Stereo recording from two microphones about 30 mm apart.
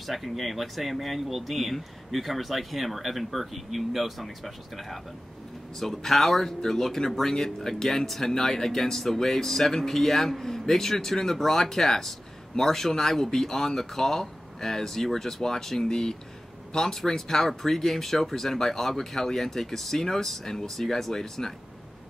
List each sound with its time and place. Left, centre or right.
0.0 s speech: centre
5.8 s speech: centre